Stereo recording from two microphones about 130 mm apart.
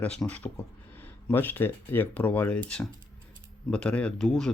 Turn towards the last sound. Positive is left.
turn(degrees=5)  # may be behind; listen again after turning